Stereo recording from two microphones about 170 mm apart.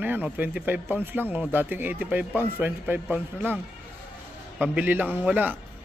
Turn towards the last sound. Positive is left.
turn(degrees=-10)  # may be behind; listen again after turning